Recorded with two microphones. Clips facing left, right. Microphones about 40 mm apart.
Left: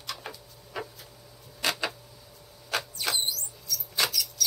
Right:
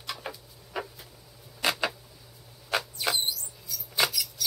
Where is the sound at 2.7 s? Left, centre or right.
Centre.